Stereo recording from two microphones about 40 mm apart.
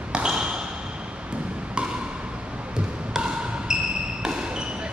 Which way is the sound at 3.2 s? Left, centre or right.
Centre.